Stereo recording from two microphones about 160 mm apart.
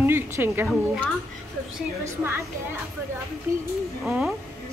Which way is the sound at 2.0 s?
15° right (ahead or behind).